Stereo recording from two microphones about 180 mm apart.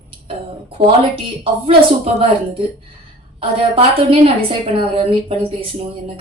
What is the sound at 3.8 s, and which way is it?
A woman's voice, 35° right (ahead or behind).